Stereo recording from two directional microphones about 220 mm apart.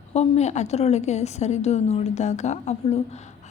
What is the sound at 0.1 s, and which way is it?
A woman's voice, 30° left (ahead or behind).